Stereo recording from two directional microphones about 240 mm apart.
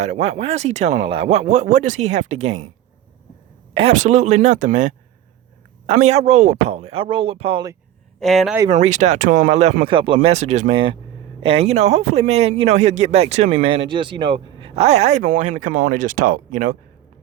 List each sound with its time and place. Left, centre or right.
0.0 s speech: right
3.8 s speech: right
8.2 s speech: centre
8.7 s speech: right